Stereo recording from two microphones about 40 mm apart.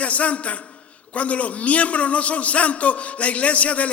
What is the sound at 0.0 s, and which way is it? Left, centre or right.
A man's voice, left.